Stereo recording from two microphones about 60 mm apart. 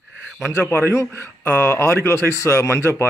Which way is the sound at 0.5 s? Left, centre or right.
Left.